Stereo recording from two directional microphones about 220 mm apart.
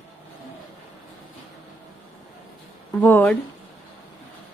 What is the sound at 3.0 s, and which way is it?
Speech, 5° left (ahead or behind).